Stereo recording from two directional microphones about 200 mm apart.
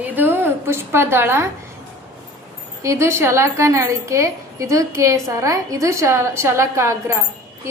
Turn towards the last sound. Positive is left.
turn(degrees=-15)  # may be behind; listen again after turning